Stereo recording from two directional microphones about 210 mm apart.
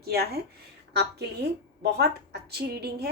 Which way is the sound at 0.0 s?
50° right (ahead or behind).